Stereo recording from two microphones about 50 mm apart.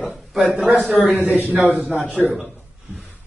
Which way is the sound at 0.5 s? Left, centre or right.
Centre.